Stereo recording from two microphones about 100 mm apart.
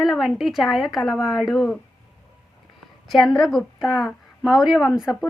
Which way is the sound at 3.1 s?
Centre (ahead or behind).